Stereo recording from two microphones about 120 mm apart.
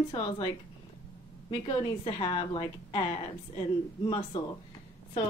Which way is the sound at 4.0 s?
40° left (ahead or behind).